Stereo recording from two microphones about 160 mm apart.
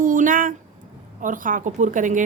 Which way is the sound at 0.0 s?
55° right (ahead or behind).